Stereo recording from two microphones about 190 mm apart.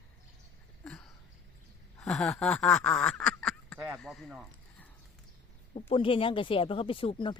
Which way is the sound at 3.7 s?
10° right (ahead or behind).